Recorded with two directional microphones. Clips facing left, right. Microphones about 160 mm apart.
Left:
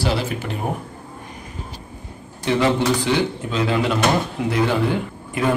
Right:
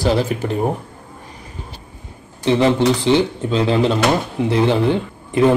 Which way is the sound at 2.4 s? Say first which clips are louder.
Right 4 dB; 25° right (ahead or behind).